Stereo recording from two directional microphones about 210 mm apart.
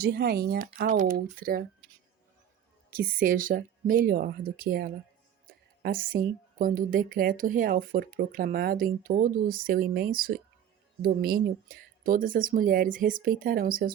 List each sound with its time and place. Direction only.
0.0 s a woman's voice: 50° right (ahead or behind)
2.9 s a woman's voice: 40° right (ahead or behind)